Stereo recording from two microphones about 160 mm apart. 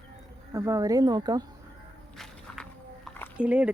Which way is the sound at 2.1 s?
Centre (ahead or behind).